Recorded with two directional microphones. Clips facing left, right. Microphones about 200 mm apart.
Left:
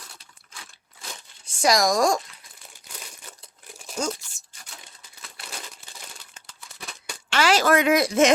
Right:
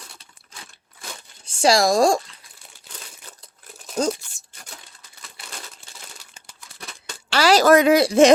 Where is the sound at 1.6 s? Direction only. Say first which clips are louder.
Right 4 dB; 30° right (ahead or behind).